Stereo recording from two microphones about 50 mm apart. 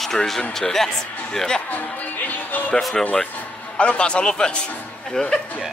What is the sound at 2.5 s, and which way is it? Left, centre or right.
Music, left.